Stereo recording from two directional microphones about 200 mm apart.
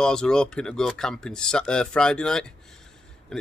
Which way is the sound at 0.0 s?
5° left (ahead or behind).